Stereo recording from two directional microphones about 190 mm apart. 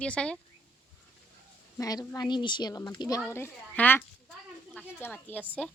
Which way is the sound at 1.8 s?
20° left (ahead or behind).